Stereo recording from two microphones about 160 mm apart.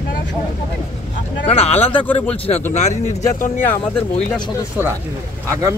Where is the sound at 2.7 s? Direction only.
45° left (ahead or behind).